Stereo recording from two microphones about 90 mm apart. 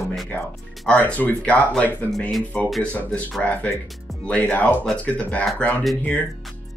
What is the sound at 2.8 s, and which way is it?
Speech, 15° left (ahead or behind).